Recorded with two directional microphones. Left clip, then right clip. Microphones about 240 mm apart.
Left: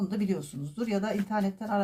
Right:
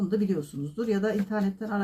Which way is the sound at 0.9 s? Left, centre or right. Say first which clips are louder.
Right 2 dB; left.